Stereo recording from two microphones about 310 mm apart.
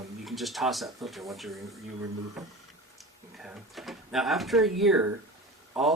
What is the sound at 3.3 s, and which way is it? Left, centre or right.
Speech, centre.